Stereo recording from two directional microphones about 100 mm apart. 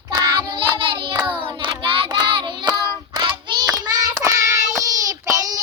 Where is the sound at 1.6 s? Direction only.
60° right (ahead or behind).